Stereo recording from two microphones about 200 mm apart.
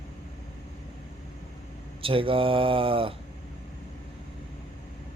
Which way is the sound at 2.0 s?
25° right (ahead or behind).